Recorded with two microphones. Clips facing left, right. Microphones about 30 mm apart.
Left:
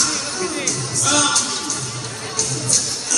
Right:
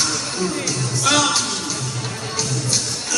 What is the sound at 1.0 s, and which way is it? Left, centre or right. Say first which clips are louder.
Music: right 1 dB; right.